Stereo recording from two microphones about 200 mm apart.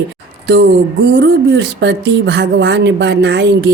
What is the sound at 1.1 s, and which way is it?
A woman's voice, 60° right (ahead or behind).